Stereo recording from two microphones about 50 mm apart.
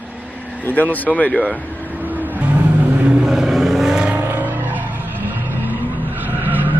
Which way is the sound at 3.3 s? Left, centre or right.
Centre.